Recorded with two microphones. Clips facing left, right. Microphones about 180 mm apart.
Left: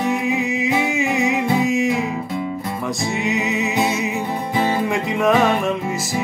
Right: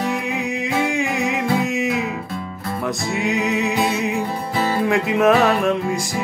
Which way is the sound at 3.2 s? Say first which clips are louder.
Right 2 dB; centre (ahead or behind).